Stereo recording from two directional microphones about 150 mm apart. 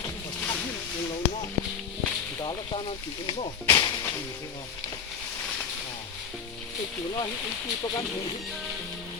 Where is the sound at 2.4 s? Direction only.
30° left (ahead or behind).